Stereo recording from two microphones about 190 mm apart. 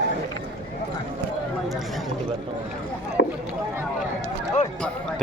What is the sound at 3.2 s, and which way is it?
Rowboat, 70° left (ahead or behind).